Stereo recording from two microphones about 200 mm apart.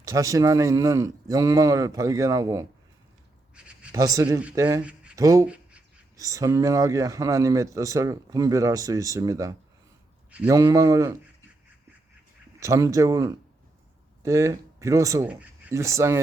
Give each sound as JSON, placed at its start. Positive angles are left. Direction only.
{"t": 0.1, "sound": "a man's voice", "side_deg": -15}
{"t": 3.5, "sound": "a sound", "side_deg": -5}
{"t": 3.9, "sound": "a man's voice", "side_deg": -15}
{"t": 5.1, "sound": "a sound", "side_deg": -15}
{"t": 6.1, "sound": "a man's voice", "side_deg": -15}
{"t": 12.5, "sound": "a man's voice", "side_deg": -15}